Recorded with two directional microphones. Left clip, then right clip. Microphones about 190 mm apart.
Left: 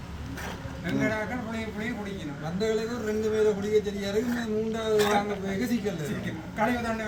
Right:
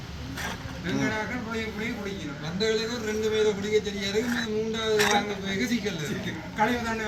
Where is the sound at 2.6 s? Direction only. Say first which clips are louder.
Right 2 dB; 75° left (ahead or behind).